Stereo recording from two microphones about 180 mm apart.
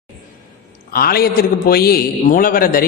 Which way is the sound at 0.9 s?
55° left (ahead or behind).